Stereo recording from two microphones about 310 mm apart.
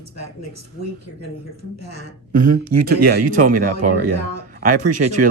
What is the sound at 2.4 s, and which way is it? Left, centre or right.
Speech, right.